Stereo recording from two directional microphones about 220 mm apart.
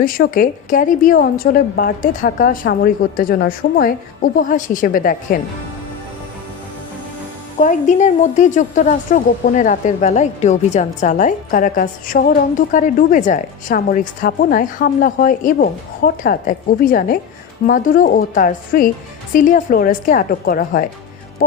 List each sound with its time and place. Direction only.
0.0 s a woman's voice: 40° left (ahead or behind)
7.6 s a woman's voice: 35° left (ahead or behind)